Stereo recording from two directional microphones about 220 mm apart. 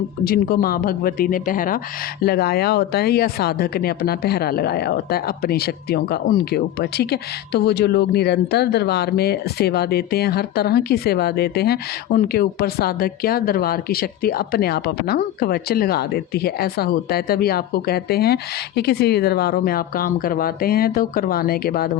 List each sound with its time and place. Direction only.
0.3 s speech: 45° left (ahead or behind)